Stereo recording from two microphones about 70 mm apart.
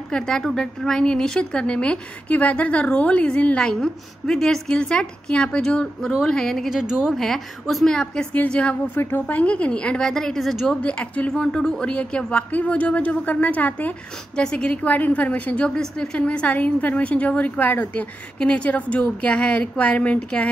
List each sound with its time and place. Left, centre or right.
0.1 s a woman's voice: centre
6.7 s speech: centre
7.2 s a woman's voice: centre
8.9 s a woman's voice: left
9.2 s speech: centre
10.7 s speech: centre
14.3 s speech: centre